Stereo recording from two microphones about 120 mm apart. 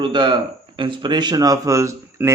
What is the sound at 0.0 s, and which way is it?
Mantra, 40° right (ahead or behind).